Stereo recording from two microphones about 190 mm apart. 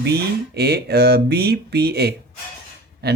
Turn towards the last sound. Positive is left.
turn(degrees=-60)  # may be behind; listen again after turning